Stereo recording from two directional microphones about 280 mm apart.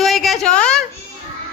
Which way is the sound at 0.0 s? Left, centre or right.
Centre.